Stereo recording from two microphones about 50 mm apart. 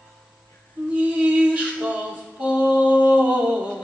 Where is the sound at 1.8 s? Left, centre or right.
Right.